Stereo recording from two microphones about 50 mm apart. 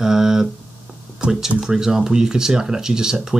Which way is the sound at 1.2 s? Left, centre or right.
Right.